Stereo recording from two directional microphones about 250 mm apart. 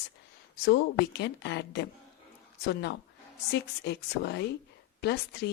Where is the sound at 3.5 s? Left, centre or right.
Left.